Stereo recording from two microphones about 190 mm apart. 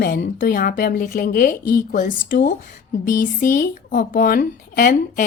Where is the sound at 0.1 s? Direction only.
45° left (ahead or behind).